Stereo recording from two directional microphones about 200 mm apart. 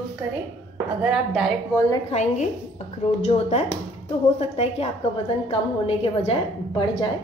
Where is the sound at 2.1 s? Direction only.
35° left (ahead or behind).